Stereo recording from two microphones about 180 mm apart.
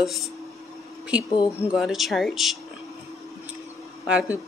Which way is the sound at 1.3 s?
25° left (ahead or behind).